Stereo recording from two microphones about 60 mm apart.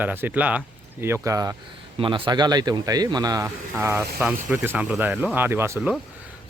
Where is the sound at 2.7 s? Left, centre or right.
Right.